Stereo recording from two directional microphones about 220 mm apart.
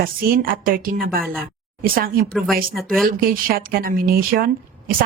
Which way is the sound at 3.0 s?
40° right (ahead or behind).